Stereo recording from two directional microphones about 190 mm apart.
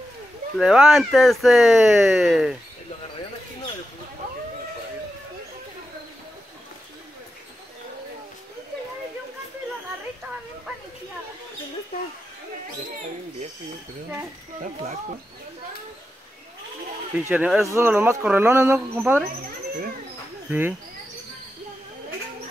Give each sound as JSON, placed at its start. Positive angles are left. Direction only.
{"t": 0.6, "sound": "speech", "side_deg": -5}
{"t": 14.6, "sound": "speech", "side_deg": -35}
{"t": 17.1, "sound": "speech", "side_deg": -10}
{"t": 20.4, "sound": "speech", "side_deg": -10}